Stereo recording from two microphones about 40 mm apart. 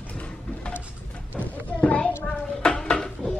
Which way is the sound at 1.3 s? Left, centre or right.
Left.